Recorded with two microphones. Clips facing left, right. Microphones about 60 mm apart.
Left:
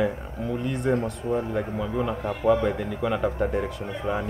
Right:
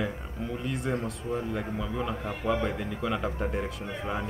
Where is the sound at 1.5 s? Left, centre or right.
Centre.